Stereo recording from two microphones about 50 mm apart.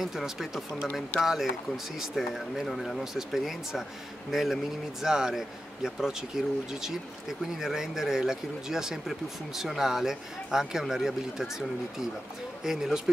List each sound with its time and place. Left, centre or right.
0.0 s speech: centre
12.6 s speech: centre